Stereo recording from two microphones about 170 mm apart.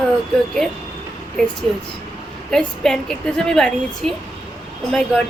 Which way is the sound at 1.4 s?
5° left (ahead or behind).